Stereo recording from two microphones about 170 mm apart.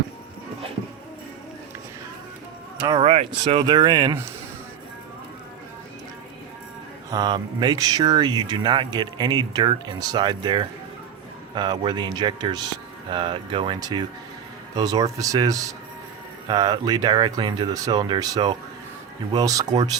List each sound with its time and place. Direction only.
2.8 s speech: 30° right (ahead or behind)
7.1 s speech: 25° right (ahead or behind)